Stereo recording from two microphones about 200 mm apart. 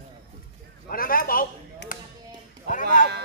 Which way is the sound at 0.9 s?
45° left (ahead or behind).